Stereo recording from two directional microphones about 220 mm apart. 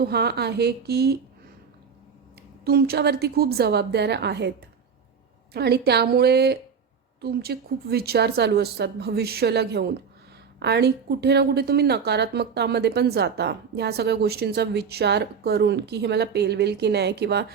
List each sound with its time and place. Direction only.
0.0 s a woman's voice: 45° right (ahead or behind)
2.6 s a woman's voice: 45° right (ahead or behind)
5.5 s a woman's voice: 45° right (ahead or behind)